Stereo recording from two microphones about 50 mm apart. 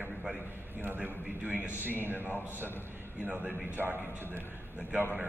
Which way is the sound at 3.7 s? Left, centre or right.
Right.